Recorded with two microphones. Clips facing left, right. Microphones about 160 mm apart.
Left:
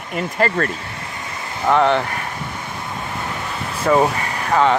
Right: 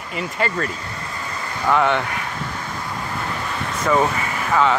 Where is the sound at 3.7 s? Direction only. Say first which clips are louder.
Left 3 dB; 30° left (ahead or behind).